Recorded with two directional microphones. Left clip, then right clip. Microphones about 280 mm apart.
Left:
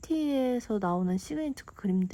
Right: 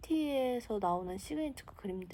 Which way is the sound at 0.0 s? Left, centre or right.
Left.